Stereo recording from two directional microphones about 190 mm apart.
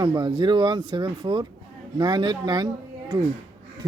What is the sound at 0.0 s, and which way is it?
Speech, 20° right (ahead or behind).